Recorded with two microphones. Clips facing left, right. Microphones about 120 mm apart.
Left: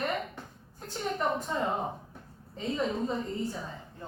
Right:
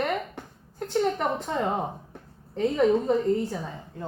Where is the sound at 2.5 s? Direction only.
70° right (ahead or behind).